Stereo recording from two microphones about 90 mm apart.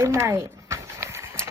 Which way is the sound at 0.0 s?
30° right (ahead or behind).